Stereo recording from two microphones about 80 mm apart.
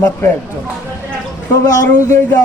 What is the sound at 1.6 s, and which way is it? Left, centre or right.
Speech, left.